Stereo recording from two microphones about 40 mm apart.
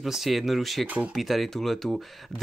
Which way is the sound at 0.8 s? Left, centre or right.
Right.